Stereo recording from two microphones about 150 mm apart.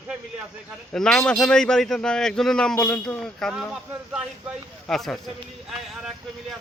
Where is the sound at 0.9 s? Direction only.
5° left (ahead or behind).